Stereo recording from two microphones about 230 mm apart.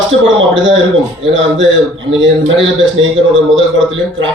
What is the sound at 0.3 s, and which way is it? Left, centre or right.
A man's voice, right.